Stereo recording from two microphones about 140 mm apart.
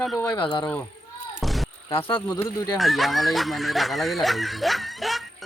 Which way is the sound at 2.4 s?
25° left (ahead or behind).